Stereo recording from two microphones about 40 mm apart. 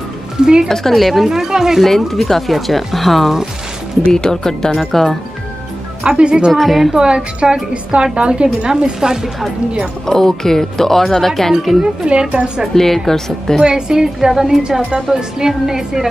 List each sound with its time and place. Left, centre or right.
0.4 s a woman's voice: centre
0.7 s a woman's voice: centre
1.9 s speech: centre
4.0 s speech: centre
6.0 s a woman's voice: right
6.5 s speech: centre
7.4 s a woman's voice: right
10.0 s speech: centre
11.8 s a woman's voice: right
12.7 s speech: centre
13.6 s a woman's voice: centre